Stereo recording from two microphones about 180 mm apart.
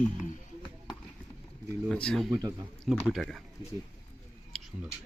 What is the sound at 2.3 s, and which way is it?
Speech, 25° right (ahead or behind).